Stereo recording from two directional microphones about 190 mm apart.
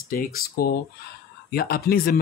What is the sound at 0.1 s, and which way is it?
Speech, 50° left (ahead or behind).